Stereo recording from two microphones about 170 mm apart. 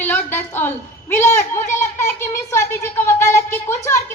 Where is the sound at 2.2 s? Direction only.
15° left (ahead or behind).